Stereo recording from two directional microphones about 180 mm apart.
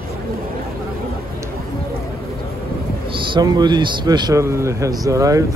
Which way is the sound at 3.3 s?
25° right (ahead or behind).